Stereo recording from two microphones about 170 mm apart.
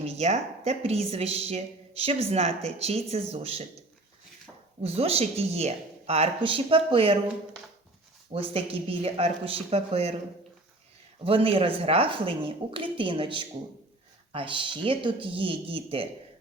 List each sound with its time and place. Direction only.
0.0 s speech: 40° right (ahead or behind)
4.8 s speech: 35° right (ahead or behind)
8.3 s speech: 35° right (ahead or behind)
11.3 s speech: 35° right (ahead or behind)